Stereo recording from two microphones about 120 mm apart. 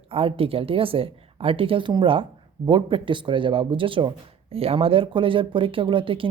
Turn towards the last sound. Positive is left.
turn(degrees=-45)  # may be behind; listen again after turning